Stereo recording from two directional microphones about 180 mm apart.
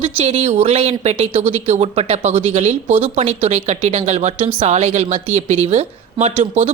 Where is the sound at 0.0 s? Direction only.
35° right (ahead or behind).